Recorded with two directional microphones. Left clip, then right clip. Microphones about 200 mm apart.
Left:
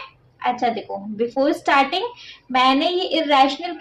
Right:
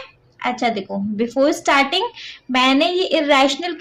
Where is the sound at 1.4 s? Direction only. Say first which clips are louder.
Right 2 dB; 25° right (ahead or behind).